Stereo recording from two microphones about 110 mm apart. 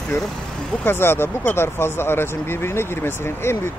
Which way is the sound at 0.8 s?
20° left (ahead or behind).